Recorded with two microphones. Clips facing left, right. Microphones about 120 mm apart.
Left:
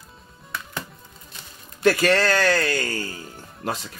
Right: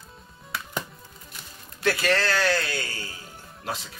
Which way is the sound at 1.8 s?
45° left (ahead or behind).